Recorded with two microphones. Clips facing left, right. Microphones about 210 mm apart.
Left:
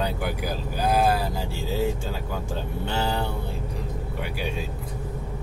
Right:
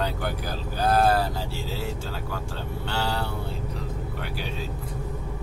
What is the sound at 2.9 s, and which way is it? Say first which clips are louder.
Speech: left 2 dB; 15° left (ahead or behind).